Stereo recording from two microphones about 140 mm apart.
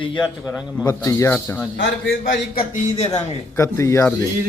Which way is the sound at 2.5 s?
50° left (ahead or behind).